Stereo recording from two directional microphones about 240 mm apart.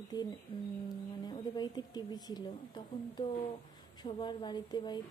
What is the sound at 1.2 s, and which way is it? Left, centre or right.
Speech, centre.